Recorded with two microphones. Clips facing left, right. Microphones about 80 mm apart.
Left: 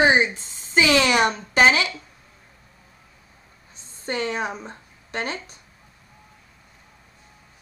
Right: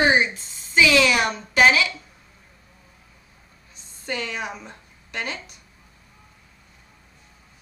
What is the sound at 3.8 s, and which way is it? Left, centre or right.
A woman's voice, left.